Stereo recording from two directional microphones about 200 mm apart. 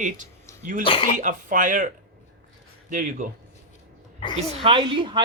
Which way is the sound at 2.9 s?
40° right (ahead or behind).